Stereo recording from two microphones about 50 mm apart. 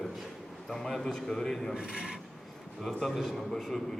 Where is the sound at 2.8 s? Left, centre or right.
Centre.